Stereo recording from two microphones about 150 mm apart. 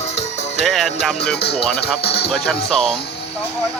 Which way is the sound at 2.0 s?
90° left.